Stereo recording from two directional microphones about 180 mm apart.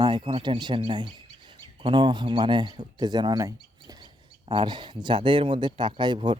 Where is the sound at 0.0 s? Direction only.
25° right (ahead or behind).